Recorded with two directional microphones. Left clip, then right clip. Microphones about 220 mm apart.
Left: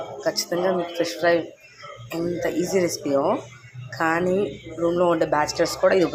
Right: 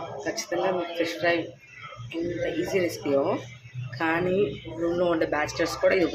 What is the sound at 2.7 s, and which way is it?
Speech, 15° left (ahead or behind).